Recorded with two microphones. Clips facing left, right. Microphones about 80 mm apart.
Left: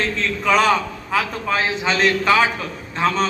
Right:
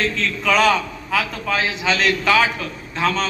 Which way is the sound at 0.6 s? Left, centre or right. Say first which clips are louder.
Right 1 dB; left.